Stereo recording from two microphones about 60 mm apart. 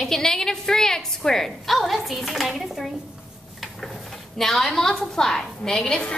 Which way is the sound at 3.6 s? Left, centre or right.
Centre.